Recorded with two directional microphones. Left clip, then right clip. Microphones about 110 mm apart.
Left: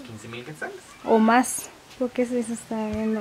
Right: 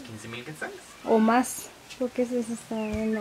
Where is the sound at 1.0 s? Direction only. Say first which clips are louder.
Left 3 dB; 20° left (ahead or behind).